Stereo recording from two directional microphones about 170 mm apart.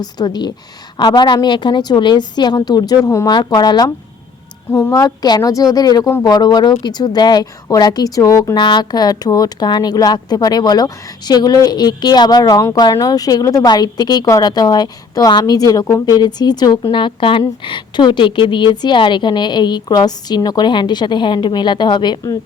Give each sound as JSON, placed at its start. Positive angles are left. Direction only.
{"t": 0.0, "sound": "speech", "side_deg": 25}